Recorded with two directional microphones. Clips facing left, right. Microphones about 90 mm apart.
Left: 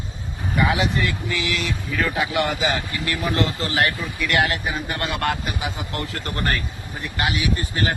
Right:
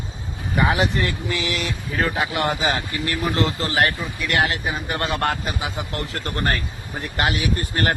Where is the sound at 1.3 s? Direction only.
35° right (ahead or behind).